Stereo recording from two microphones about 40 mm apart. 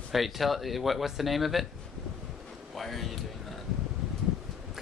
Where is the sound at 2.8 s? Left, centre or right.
Centre.